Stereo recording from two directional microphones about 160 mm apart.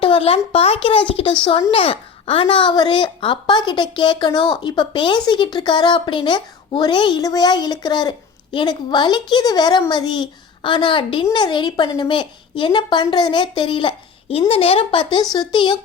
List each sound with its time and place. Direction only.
0.0 s a woman's voice: 35° left (ahead or behind)